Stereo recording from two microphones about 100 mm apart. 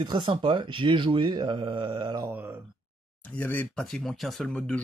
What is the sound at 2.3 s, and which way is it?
Speech, 20° right (ahead or behind).